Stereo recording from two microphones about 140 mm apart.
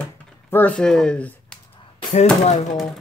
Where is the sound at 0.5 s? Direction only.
10° left (ahead or behind).